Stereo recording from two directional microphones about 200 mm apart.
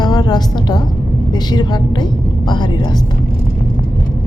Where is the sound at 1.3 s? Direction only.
20° left (ahead or behind).